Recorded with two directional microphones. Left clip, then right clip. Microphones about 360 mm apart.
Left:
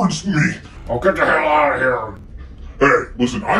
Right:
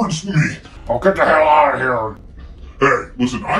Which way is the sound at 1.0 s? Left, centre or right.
Right.